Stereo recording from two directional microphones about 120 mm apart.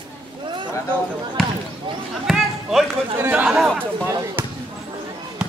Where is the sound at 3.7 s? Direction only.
20° right (ahead or behind).